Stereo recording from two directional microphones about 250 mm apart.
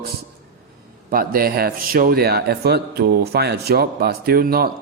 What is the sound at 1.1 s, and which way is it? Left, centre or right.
A man's voice, right.